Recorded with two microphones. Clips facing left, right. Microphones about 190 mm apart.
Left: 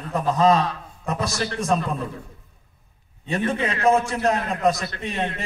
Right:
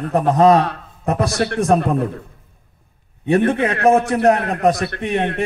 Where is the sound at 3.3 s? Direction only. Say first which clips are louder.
Right 8 dB; 60° right (ahead or behind).